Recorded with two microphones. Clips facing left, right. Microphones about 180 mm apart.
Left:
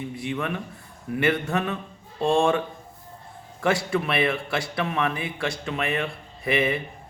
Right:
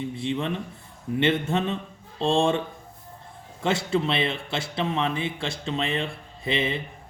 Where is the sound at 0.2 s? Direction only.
25° right (ahead or behind).